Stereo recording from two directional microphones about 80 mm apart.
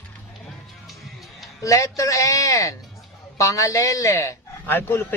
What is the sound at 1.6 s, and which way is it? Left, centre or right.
A man's voice, left.